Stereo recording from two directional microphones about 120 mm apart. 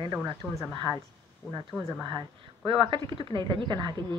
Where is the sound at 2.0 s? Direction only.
40° right (ahead or behind).